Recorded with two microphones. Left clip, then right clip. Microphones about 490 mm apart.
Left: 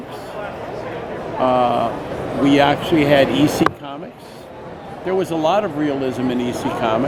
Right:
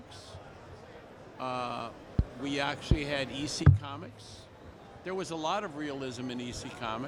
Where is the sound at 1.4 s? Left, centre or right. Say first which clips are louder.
Left 19 dB; right.